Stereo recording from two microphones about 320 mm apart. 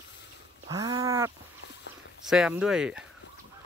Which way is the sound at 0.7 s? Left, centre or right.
Centre.